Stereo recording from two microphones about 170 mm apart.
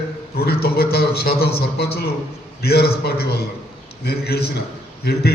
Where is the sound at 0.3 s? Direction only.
65° left (ahead or behind).